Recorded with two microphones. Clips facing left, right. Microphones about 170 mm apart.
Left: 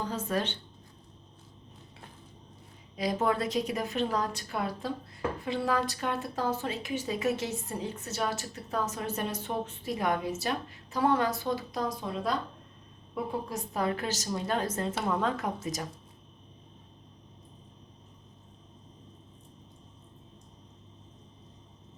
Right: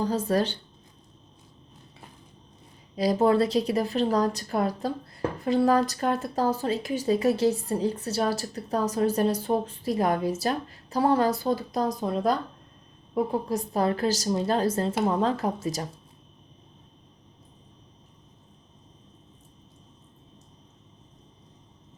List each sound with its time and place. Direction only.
0.0 s a woman's voice: 35° right (ahead or behind)
2.9 s a woman's voice: 35° right (ahead or behind)